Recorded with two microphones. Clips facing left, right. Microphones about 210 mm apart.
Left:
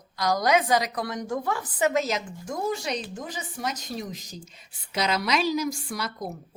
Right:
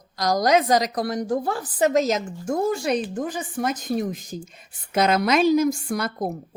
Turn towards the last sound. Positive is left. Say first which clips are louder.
# right 7 dB
turn(degrees=-55)  # may be behind; listen again after turning